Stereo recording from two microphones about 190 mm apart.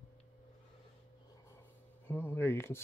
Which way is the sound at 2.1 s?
10° left (ahead or behind).